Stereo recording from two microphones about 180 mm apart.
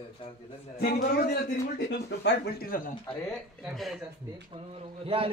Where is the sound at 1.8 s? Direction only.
70° left (ahead or behind).